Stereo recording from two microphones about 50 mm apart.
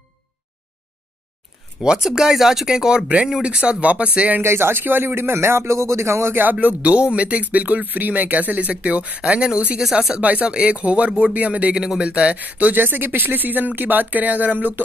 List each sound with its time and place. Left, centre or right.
1.8 s speech: centre
4.4 s speech: right
6.3 s speech: right; by 9.8 s centre
10.2 s speech: right
11.7 s speech: centre; by 14.8 s right